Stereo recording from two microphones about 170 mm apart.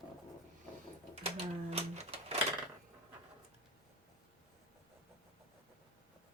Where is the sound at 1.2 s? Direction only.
35° right (ahead or behind).